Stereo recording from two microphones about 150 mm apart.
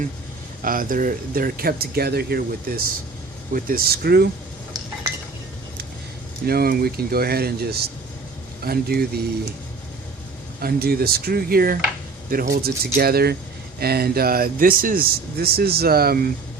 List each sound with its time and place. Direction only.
0.6 s speech: 70° right (ahead or behind); by 4.3 s 90° right
6.4 s speech: 90° right
10.6 s speech: 90° right